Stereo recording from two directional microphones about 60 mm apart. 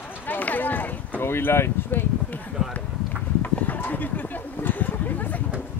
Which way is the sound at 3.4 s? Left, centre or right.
Left.